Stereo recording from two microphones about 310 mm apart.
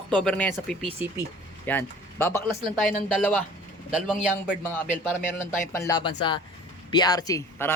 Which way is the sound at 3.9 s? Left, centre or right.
Centre.